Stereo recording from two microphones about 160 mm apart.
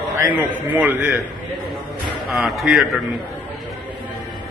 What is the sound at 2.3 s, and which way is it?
Speech, centre (ahead or behind).